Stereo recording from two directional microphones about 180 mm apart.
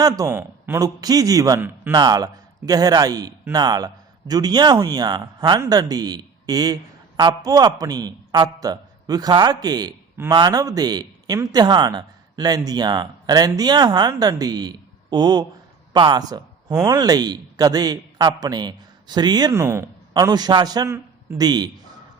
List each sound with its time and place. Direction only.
0.0 s a man's voice: 20° right (ahead or behind)